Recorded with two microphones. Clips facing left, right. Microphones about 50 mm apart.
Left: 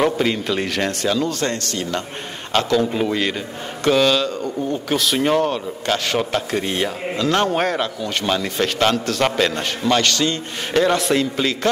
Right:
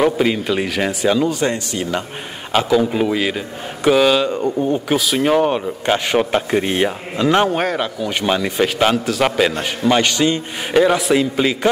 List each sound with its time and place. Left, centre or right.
0.0 s a man's voice: centre
4.9 s a man's voice: centre
5.5 s a man's voice: right
7.4 s a man's voice: centre